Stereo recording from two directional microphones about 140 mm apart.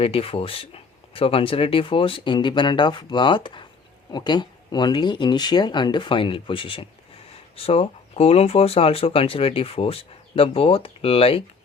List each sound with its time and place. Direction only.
0.0 s speech: 45° left (ahead or behind)